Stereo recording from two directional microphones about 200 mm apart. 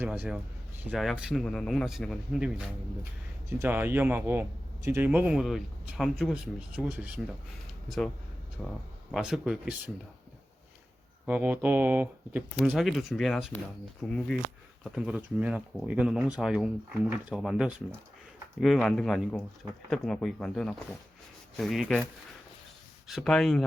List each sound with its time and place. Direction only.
0.0 s a man's voice: 5° right (ahead or behind)
11.3 s a man's voice: 10° right (ahead or behind)
23.0 s speech: centre (ahead or behind)